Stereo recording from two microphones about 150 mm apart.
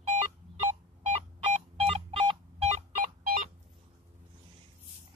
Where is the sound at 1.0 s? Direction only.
45° right (ahead or behind).